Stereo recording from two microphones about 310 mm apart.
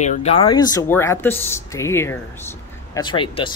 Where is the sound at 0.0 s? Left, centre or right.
Left.